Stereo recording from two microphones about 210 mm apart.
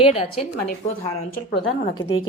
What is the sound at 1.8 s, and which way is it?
Speech, 20° left (ahead or behind).